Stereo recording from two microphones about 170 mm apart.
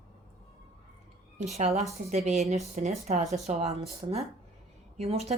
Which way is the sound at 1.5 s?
40° right (ahead or behind).